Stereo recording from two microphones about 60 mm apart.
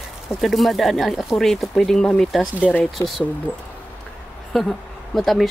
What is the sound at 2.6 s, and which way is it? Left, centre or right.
Speech, left.